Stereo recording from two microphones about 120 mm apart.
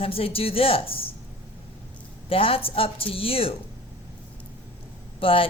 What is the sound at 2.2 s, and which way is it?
A woman's voice, 50° left (ahead or behind).